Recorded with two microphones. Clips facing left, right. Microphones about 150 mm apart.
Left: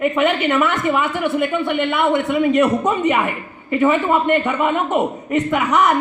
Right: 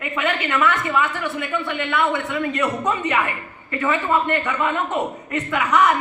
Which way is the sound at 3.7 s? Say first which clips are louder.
Left 5 dB; 15° left (ahead or behind).